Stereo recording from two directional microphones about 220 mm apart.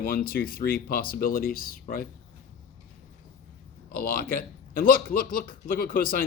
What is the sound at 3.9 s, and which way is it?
Speech, 45° left (ahead or behind).